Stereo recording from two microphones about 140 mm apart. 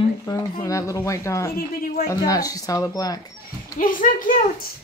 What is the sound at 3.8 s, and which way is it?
Speech, 75° left (ahead or behind).